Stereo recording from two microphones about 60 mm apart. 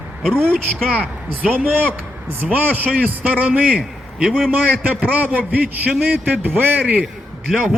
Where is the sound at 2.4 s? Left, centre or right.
Right.